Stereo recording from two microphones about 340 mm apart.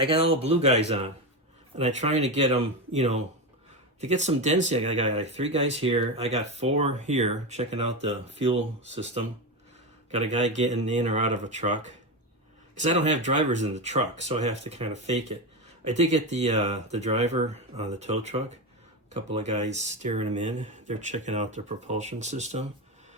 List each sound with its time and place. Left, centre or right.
0.0 s speech: centre
10.1 s speech: centre
12.8 s speech: right